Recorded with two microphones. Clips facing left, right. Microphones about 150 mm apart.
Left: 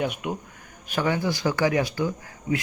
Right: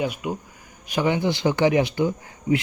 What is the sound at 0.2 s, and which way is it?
Speech, centre (ahead or behind).